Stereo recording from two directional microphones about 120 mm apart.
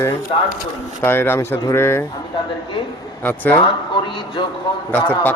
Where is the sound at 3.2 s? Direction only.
15° left (ahead or behind).